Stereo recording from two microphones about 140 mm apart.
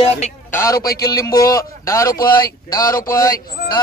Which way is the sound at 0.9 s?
90° left.